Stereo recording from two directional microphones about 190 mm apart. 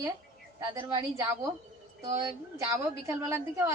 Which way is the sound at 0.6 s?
20° right (ahead or behind).